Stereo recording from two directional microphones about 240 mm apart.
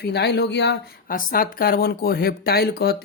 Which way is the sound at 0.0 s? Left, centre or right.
Left.